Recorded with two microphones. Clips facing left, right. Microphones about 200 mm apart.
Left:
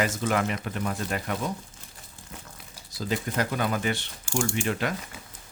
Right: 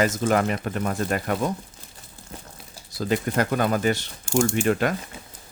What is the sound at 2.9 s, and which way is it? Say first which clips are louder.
Speech: right 5 dB; 55° right (ahead or behind).